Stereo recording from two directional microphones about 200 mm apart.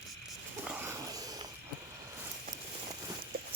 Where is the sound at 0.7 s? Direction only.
10° right (ahead or behind).